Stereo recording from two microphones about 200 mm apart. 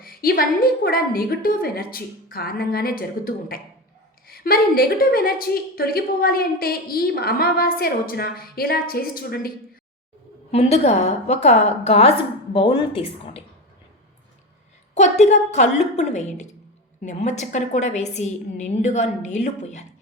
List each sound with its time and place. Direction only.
0.0 s a woman's voice: 50° left (ahead or behind)
10.5 s a woman's voice: 30° left (ahead or behind)
14.9 s a woman's voice: 35° left (ahead or behind)